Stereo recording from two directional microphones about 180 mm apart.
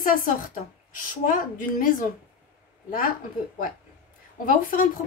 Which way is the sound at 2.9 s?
50° left (ahead or behind).